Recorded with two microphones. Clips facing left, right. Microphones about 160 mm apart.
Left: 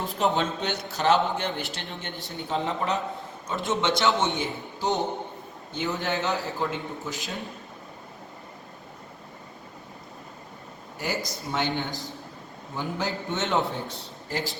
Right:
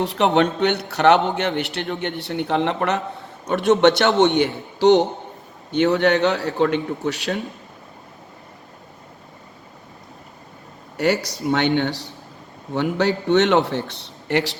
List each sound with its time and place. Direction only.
0.0 s a man's voice: 75° right (ahead or behind)
10.9 s a man's voice: 70° right (ahead or behind)